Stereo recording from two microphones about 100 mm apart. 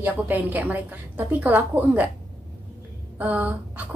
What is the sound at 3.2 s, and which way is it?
Speech, 15° right (ahead or behind).